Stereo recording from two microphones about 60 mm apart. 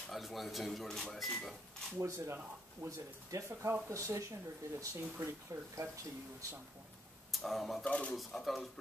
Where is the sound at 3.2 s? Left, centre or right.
Right.